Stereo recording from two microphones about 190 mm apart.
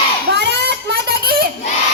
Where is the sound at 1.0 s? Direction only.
50° right (ahead or behind).